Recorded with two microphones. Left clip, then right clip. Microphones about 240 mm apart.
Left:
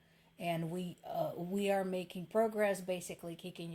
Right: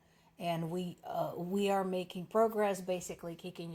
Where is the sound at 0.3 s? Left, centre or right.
Right.